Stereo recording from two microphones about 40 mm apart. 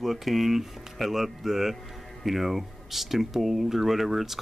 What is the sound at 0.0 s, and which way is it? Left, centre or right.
Speech, centre.